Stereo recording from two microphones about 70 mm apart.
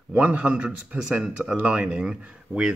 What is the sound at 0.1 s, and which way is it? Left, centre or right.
Speech, centre.